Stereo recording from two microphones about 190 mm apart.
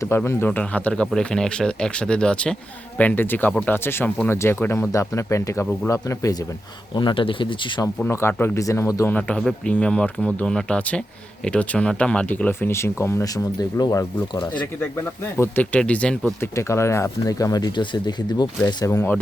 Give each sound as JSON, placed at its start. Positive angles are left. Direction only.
{"t": 0.0, "sound": "a man's voice", "side_deg": 15}
{"t": 7.9, "sound": "speech", "side_deg": 10}
{"t": 18.9, "sound": "speech", "side_deg": 10}